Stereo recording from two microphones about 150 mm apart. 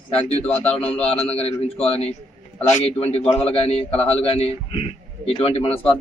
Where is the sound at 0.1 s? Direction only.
40° left (ahead or behind).